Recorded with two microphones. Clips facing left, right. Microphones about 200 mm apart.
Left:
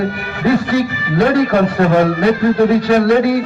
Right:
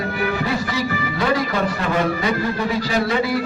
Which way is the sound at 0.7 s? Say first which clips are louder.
Left 7 dB; 55° left (ahead or behind).